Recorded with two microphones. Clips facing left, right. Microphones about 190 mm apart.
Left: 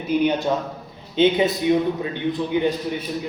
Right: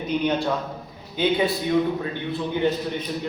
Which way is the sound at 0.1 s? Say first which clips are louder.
Left 4 dB; 15° left (ahead or behind).